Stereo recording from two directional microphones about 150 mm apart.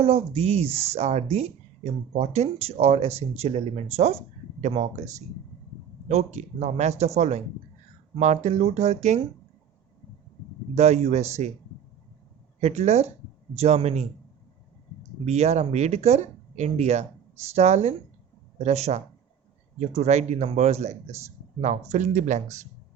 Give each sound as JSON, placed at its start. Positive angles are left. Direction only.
{"t": 0.0, "sound": "speech", "side_deg": -40}
{"t": 10.8, "sound": "speech", "side_deg": -50}
{"t": 12.5, "sound": "speech", "side_deg": -45}
{"t": 15.2, "sound": "speech", "side_deg": -45}